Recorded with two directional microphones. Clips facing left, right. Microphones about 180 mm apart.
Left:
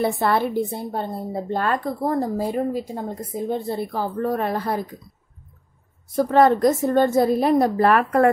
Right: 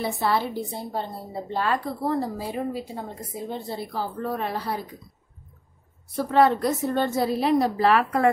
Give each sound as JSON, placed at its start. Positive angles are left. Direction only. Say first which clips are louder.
{"t": 0.0, "sound": "a woman's voice", "louder": "left 4 dB", "side_deg": 55}
{"t": 6.1, "sound": "a woman's voice", "louder": "left 4 dB", "side_deg": 45}